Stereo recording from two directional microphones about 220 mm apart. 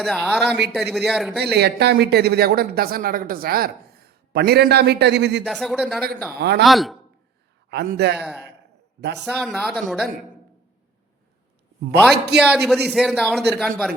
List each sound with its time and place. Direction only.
0.0 s speech: centre (ahead or behind)
0.6 s speech: 50° right (ahead or behind)
0.9 s speech: centre (ahead or behind)
1.4 s speech: 50° right (ahead or behind)
5.5 s speech: centre (ahead or behind)
7.7 s speech: 45° right (ahead or behind)
8.2 s speech: 5° right (ahead or behind)
12.1 s speech: 50° right (ahead or behind)
12.4 s speech: 5° right (ahead or behind)